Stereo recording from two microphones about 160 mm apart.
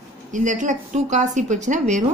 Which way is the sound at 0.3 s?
50° right (ahead or behind).